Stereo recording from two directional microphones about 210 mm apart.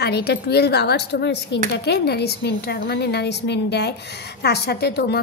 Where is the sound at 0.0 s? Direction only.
50° left (ahead or behind).